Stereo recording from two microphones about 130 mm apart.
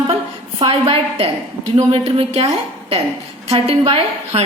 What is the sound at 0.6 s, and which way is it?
A woman's voice, 45° right (ahead or behind).